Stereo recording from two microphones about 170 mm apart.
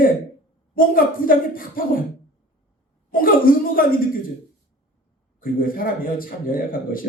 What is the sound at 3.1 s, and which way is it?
Speech, 55° left (ahead or behind).